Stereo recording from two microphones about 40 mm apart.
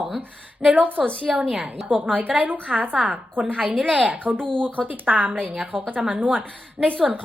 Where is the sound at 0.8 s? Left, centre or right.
Right.